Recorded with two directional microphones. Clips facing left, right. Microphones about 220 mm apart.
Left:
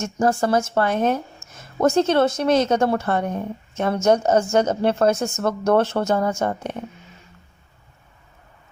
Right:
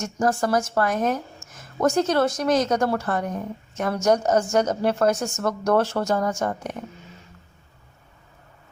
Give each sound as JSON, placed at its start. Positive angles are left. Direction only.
{"t": 0.0, "sound": "a woman's voice", "side_deg": 25}